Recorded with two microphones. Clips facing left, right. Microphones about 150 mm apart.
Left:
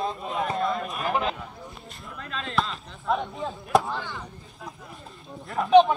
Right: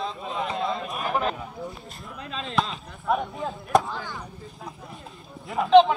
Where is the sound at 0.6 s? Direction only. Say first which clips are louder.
Left 1 dB; 20° right (ahead or behind).